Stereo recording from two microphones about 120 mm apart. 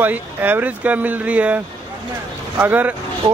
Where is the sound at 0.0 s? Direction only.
15° right (ahead or behind).